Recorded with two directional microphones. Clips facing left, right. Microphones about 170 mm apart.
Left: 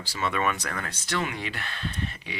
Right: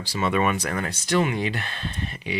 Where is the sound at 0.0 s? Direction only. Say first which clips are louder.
Right 5 dB; 15° right (ahead or behind).